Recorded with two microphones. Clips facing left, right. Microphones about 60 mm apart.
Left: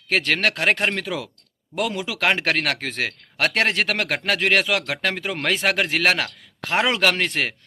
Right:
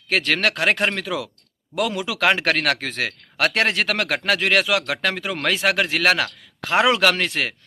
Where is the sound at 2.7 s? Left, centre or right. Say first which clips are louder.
Even; left.